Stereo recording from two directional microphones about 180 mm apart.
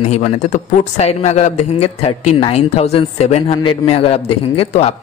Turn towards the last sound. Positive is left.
turn(degrees=35)  # may be behind; listen again after turning